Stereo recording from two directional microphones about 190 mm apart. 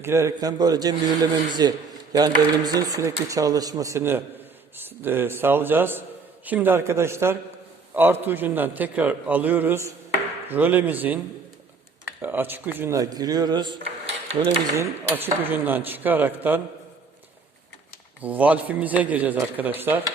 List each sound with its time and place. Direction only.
0.0 s a man's voice: 15° right (ahead or behind)
12.2 s speech: 10° right (ahead or behind); by 14.5 s 25° right (ahead or behind)
14.7 s a man's voice: 15° right (ahead or behind)
18.2 s a man's voice: 10° right (ahead or behind)